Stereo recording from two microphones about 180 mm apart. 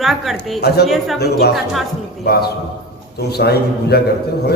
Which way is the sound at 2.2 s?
60° left (ahead or behind).